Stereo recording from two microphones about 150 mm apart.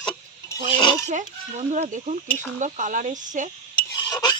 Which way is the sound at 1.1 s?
55° right (ahead or behind).